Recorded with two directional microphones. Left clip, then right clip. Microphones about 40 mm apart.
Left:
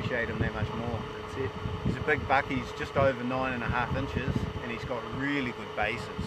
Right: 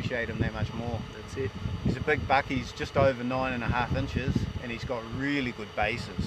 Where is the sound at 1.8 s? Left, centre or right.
Right.